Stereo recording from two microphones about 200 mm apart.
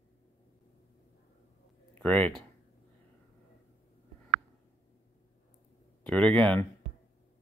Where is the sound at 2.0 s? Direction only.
10° left (ahead or behind).